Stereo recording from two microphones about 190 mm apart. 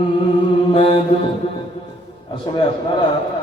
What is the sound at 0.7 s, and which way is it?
Mantra, 30° left (ahead or behind).